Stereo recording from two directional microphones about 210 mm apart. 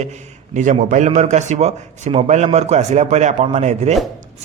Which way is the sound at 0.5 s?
35° right (ahead or behind).